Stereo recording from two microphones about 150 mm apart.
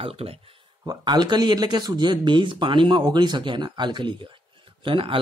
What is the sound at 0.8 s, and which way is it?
Speech, 25° right (ahead or behind).